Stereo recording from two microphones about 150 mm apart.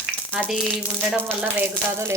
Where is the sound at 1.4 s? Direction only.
10° right (ahead or behind).